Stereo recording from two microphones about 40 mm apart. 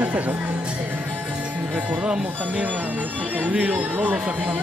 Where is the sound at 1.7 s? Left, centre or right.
Right.